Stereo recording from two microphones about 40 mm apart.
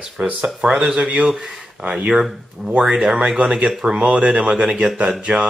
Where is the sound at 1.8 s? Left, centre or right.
Right.